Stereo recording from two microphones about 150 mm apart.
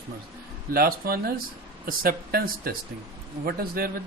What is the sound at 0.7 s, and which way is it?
Speech, 85° right.